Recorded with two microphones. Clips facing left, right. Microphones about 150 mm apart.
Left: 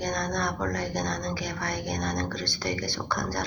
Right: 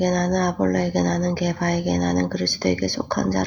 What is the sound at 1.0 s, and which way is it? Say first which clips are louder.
Speech: right 10 dB; 45° right (ahead or behind).